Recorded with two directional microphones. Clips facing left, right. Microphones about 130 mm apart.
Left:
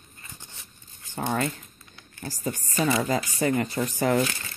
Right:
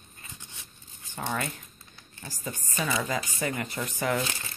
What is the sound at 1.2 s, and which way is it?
Speech, 45° left (ahead or behind).